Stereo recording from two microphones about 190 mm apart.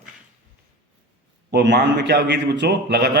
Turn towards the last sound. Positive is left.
turn(degrees=-60)  # may be behind; listen again after turning